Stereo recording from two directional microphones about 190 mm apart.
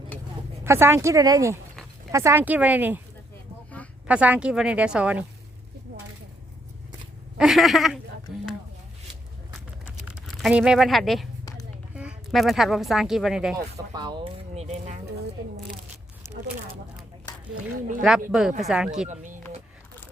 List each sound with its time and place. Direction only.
0.6 s a woman's voice: 15° right (ahead or behind)
4.0 s a woman's voice: 5° right (ahead or behind)
7.3 s speech: centre (ahead or behind)
9.8 s a sound: 5° right (ahead or behind)
11.9 s speech: 5° right (ahead or behind)
13.6 s speech: 20° right (ahead or behind); by 15.0 s 35° right (ahead or behind)
16.2 s a sound: 15° right (ahead or behind)
18.3 s speech: centre (ahead or behind)
19.0 s speech: 40° right (ahead or behind)